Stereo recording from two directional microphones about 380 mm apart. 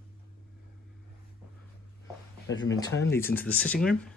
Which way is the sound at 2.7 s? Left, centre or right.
Centre.